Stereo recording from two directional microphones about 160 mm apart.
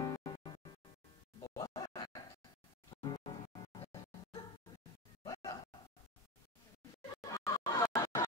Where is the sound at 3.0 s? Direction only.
30° left (ahead or behind).